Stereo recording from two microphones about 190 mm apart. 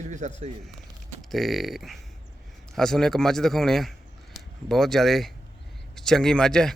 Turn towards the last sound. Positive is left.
turn(degrees=5)  # may be behind; listen again after turning